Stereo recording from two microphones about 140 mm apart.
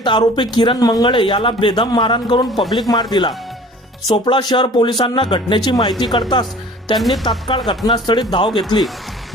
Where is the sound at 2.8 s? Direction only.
30° left (ahead or behind).